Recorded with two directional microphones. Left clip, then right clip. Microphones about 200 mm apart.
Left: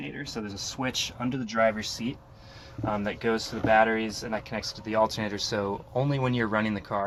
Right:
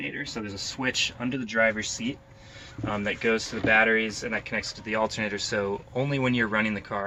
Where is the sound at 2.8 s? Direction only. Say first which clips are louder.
Right 2 dB; 40° left (ahead or behind).